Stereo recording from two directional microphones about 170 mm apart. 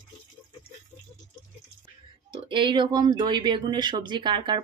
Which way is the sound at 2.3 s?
30° right (ahead or behind).